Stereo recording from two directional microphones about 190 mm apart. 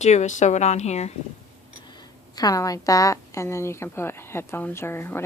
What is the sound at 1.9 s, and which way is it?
A woman's voice, 20° left (ahead or behind).